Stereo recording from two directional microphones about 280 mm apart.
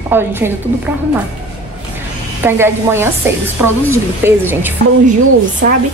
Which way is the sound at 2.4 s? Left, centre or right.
Centre.